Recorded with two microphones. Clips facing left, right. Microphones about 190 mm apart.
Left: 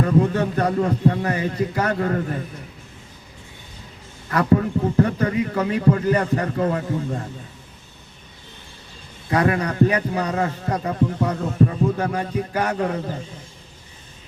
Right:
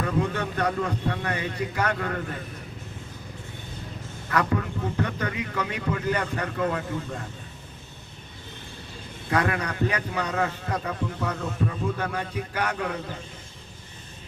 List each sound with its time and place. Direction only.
0.0 s a man's voice: 35° left (ahead or behind)
4.3 s a man's voice: 35° left (ahead or behind)
9.3 s a man's voice: 35° left (ahead or behind)